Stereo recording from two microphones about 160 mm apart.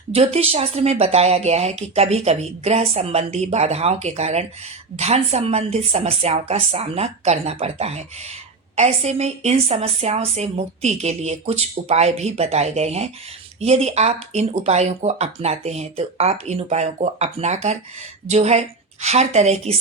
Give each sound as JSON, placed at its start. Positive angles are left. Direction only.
{"t": 0.1, "sound": "a woman's voice", "side_deg": -40}